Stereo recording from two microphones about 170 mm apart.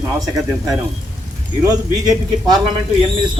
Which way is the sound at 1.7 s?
25° right (ahead or behind).